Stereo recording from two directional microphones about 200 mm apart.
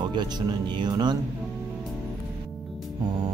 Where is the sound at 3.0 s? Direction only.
20° right (ahead or behind).